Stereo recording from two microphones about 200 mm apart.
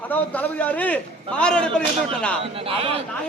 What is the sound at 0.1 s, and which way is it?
A man's voice, 10° left (ahead or behind).